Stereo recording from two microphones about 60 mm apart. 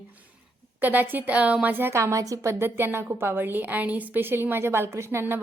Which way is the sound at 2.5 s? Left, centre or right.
Right.